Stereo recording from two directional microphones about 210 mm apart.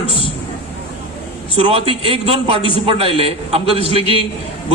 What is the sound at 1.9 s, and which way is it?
A man's voice, 25° right (ahead or behind).